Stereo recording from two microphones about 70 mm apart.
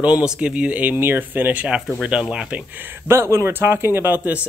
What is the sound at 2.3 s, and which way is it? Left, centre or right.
Speech, centre.